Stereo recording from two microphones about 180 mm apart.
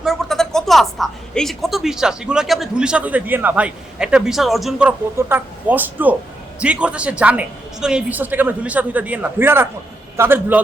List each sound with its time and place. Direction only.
0.0 s a woman's voice: centre (ahead or behind)